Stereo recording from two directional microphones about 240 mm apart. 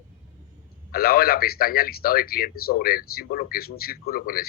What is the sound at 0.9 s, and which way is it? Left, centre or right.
A man's voice, left.